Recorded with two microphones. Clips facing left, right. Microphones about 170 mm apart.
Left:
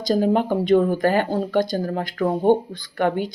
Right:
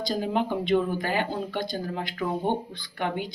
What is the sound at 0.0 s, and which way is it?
Speech, 45° left (ahead or behind).